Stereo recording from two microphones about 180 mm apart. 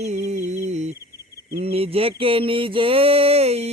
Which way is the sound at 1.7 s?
35° right (ahead or behind).